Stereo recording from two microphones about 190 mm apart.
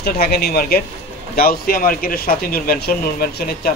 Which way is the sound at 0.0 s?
55° left (ahead or behind).